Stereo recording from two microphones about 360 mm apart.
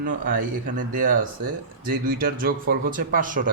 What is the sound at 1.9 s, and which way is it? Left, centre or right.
A man's voice, right.